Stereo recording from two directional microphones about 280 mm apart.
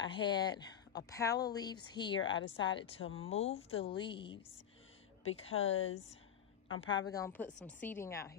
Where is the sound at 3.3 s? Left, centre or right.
Left.